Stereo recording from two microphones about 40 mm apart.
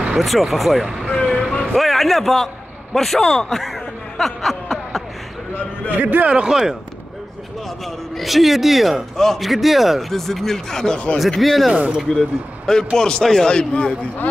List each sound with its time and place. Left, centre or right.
0.2 s a man's voice: centre
1.3 s vehicle: left
1.8 s a sound: centre
5.9 s a man's voice: right
6.5 s speech: centre
7.8 s a man's voice: centre
9.1 s a man's voice: centre
9.4 s a man's voice: centre
11.1 s a man's voice: centre
12.1 s a man's voice: centre